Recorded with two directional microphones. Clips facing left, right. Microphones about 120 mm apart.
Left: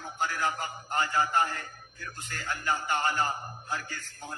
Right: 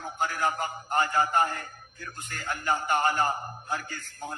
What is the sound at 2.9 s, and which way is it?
Speech, 50° right (ahead or behind).